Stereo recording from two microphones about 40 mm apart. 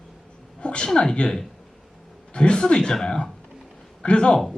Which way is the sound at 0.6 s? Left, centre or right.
Left.